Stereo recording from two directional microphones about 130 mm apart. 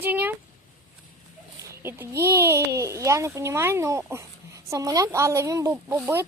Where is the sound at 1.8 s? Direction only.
20° right (ahead or behind).